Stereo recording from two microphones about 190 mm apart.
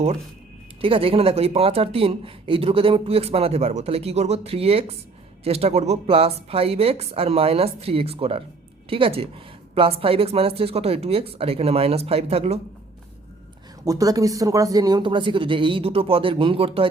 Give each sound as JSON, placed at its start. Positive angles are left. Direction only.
{"t": 0.8, "sound": "speech", "side_deg": -30}
{"t": 13.8, "sound": "speech", "side_deg": -20}